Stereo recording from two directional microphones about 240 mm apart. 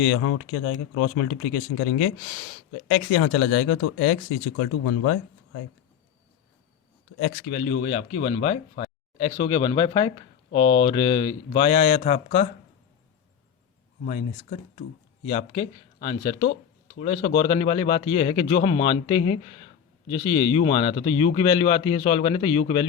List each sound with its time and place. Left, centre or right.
0.0 s speech: left
7.5 s speech: left
14.0 s speech: left